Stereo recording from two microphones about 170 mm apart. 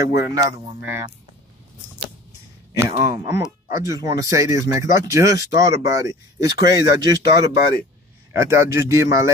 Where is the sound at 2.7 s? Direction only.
20° right (ahead or behind).